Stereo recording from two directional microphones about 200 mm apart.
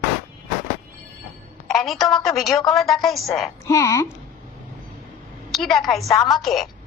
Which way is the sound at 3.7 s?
15° left (ahead or behind).